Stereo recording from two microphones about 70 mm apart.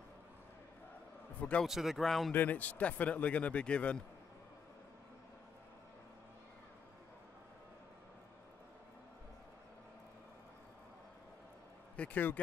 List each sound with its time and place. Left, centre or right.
1.7 s speech: centre
2.3 s speech: left
12.0 s speech: left